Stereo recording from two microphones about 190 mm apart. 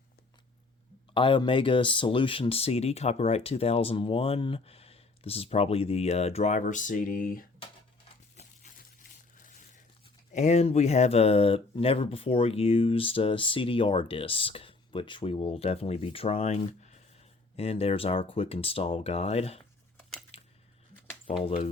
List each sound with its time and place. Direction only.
1.1 s speech: 25° left (ahead or behind); by 7.4 s 50° left (ahead or behind)
9.4 s tearing: 45° left (ahead or behind)
10.3 s speech: 35° left (ahead or behind)
20.3 s a sound: 30° left (ahead or behind)
21.2 s speech: 30° left (ahead or behind)